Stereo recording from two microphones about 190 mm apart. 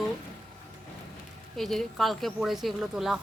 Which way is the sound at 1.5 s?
Centre (ahead or behind).